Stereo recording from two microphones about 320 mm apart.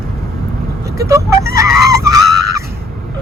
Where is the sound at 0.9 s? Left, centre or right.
Centre.